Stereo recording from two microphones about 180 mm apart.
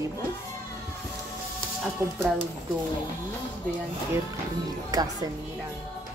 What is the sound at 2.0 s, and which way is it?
Speech, 15° right (ahead or behind).